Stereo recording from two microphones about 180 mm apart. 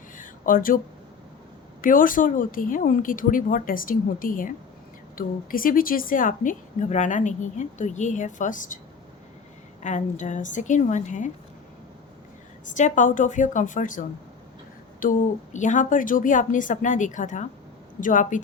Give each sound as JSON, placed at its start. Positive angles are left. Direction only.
{"t": 0.2, "sound": "a sound", "side_deg": 50}
{"t": 1.8, "sound": "a woman's voice", "side_deg": 50}
{"t": 9.8, "sound": "a woman's voice", "side_deg": 40}
{"t": 12.6, "sound": "a woman's voice", "side_deg": 45}
{"t": 15.0, "sound": "a woman's voice", "side_deg": 50}